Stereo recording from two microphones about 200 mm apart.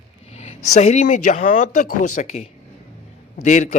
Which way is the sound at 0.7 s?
35° left (ahead or behind).